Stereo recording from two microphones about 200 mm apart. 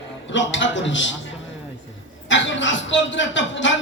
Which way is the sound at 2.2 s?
65° left (ahead or behind).